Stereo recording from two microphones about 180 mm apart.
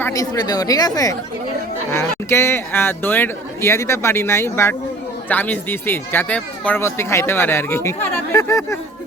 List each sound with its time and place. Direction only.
0.0 s a woman's voice: 20° left (ahead or behind)